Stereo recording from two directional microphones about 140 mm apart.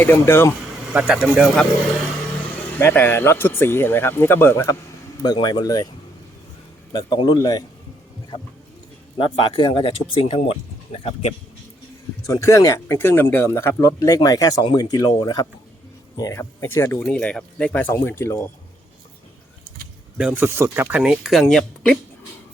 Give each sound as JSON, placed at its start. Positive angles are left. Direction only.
{"t": 0.0, "sound": "speech", "side_deg": 15}
{"t": 0.9, "sound": "speech", "side_deg": -5}
{"t": 2.7, "sound": "speech", "side_deg": 15}
{"t": 6.9, "sound": "speech", "side_deg": 30}
{"t": 9.1, "sound": "speech", "side_deg": 35}
{"t": 12.3, "sound": "speech", "side_deg": 20}
{"t": 17.0, "sound": "speech", "side_deg": 5}
{"t": 20.1, "sound": "speech", "side_deg": -10}